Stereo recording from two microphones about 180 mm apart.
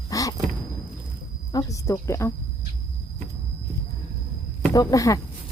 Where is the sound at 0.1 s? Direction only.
20° left (ahead or behind).